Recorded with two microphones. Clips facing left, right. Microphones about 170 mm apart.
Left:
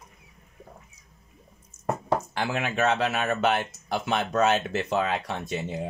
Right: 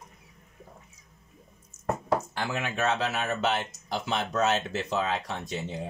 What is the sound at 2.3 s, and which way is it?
Speech, 65° left (ahead or behind).